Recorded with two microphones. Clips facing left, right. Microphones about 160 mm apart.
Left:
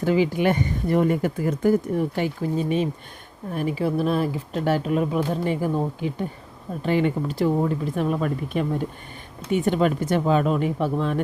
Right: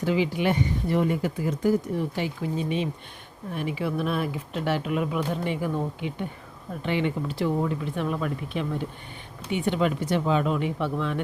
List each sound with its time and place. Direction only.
0.0 s speech: 45° left (ahead or behind)